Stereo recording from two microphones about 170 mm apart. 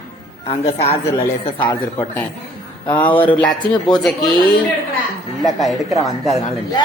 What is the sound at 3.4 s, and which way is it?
Speech, 25° left (ahead or behind).